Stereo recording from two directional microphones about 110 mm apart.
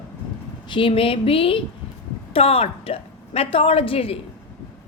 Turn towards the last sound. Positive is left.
turn(degrees=55)  # may be behind; listen again after turning